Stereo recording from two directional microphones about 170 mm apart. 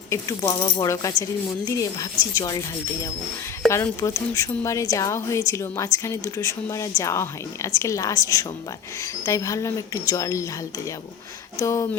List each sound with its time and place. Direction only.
0.1 s a woman's voice: 20° left (ahead or behind)
3.7 s a woman's voice: 20° left (ahead or behind)